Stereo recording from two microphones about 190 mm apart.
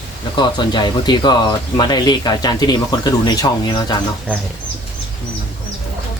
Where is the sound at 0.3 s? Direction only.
25° left (ahead or behind).